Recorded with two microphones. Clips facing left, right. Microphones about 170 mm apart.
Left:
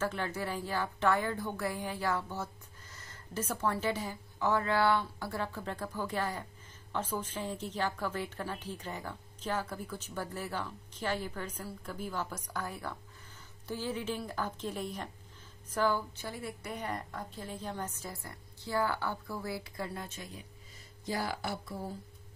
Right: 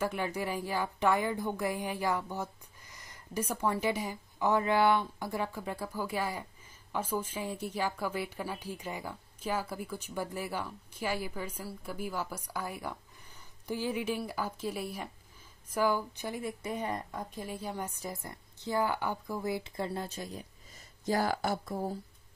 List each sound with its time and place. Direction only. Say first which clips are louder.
0.0 s a woman's voice: right 2 dB; 15° right (ahead or behind); by 20.4 s 35° right (ahead or behind)
21.0 s speech: right 5 dB; 45° right (ahead or behind)